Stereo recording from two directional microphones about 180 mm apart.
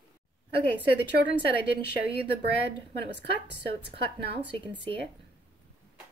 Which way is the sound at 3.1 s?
65° right (ahead or behind).